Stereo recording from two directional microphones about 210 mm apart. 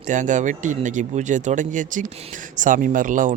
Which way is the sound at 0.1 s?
35° right (ahead or behind).